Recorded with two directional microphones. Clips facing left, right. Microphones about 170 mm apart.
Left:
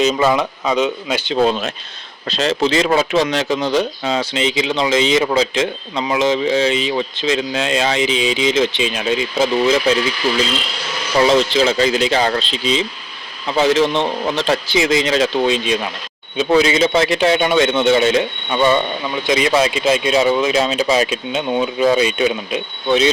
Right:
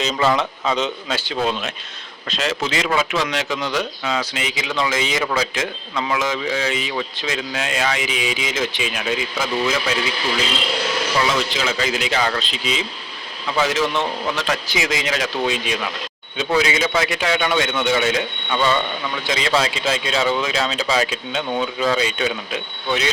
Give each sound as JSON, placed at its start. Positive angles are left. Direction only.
{"t": 0.0, "sound": "speech", "side_deg": 15}
{"t": 2.3, "sound": "speech", "side_deg": 35}
{"t": 11.2, "sound": "speech", "side_deg": 30}